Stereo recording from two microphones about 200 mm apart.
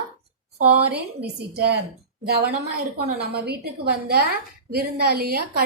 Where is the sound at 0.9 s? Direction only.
55° right (ahead or behind).